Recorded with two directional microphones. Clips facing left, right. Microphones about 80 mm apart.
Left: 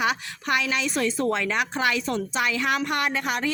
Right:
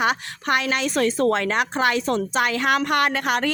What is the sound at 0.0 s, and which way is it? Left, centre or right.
A woman's voice, right.